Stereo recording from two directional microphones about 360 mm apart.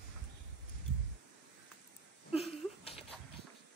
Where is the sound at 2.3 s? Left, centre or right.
Centre.